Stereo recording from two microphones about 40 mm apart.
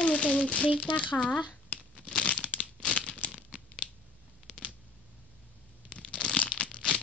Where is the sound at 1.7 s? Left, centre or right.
Left.